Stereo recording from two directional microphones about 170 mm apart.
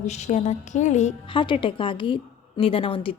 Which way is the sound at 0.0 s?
40° left (ahead or behind).